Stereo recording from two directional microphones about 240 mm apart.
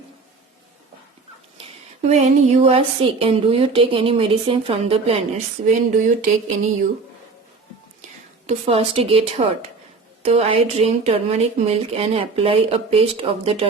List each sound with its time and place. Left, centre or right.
1.5 s a woman's voice: right
8.0 s a woman's voice: right